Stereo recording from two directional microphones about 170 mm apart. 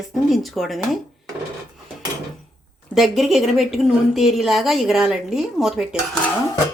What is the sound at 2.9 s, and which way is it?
A woman's voice, centre (ahead or behind).